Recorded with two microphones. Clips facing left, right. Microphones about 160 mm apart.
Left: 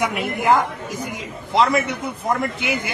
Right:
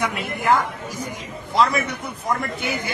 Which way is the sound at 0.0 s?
15° left (ahead or behind).